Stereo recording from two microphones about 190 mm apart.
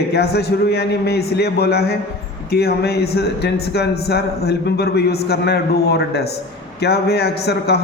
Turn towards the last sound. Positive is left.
turn(degrees=60)  # may be behind; listen again after turning